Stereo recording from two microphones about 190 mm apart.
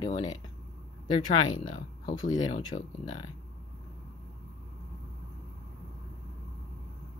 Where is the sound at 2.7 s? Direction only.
35° left (ahead or behind).